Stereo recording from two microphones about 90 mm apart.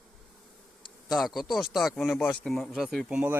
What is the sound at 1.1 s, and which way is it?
Speech, centre (ahead or behind).